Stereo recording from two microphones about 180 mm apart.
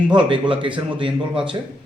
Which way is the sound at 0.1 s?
25° right (ahead or behind).